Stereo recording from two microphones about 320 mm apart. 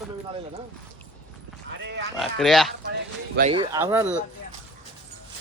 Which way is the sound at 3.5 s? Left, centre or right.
Centre.